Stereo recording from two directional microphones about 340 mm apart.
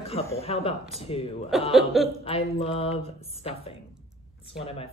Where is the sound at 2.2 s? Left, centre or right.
Centre.